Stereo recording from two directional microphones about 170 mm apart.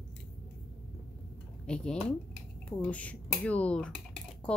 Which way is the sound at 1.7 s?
5° left (ahead or behind).